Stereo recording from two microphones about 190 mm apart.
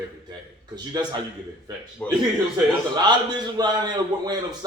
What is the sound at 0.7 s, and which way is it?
Speech, 20° right (ahead or behind).